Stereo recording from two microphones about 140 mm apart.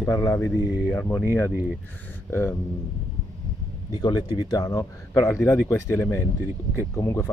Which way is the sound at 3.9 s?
30° left (ahead or behind).